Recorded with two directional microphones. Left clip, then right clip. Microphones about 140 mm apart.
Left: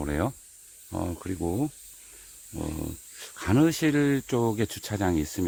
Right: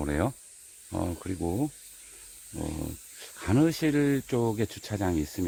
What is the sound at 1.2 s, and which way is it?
Speech, 25° left (ahead or behind).